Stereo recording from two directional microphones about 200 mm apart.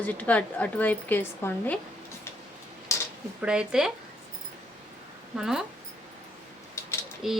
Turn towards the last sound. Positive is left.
turn(degrees=0)  # may be behind; listen again after turning